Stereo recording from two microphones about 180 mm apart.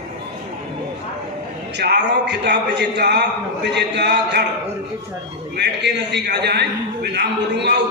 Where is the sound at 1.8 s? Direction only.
70° right (ahead or behind).